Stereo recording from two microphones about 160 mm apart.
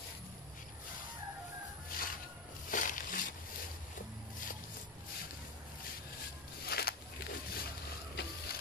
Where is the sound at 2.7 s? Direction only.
55° left (ahead or behind).